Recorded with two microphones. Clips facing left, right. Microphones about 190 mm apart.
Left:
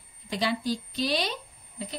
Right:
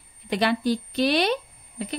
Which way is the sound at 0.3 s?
65° right (ahead or behind).